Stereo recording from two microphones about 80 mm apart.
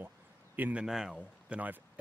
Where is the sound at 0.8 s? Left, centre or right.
Centre.